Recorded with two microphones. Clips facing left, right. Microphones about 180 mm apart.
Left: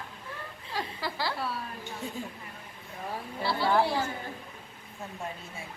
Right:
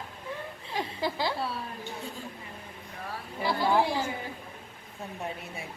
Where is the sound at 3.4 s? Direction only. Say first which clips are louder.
Right 1 dB; 15° right (ahead or behind).